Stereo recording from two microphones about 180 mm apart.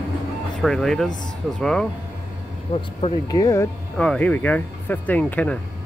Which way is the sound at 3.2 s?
20° left (ahead or behind).